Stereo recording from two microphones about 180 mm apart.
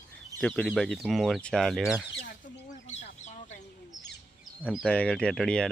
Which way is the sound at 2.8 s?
40° left (ahead or behind).